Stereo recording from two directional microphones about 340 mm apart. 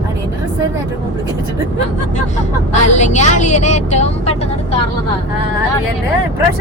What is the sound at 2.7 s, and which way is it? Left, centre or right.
Speech, left.